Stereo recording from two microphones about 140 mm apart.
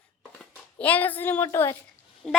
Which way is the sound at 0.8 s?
10° left (ahead or behind).